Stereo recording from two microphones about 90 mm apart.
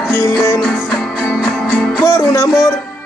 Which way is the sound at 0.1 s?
25° left (ahead or behind).